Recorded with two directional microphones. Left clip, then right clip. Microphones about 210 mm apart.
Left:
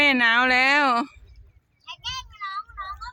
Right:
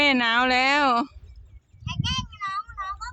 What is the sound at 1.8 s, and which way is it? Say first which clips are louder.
Child singing: right 3 dB; 45° left (ahead or behind).